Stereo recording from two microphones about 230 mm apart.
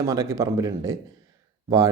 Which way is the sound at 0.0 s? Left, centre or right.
Centre.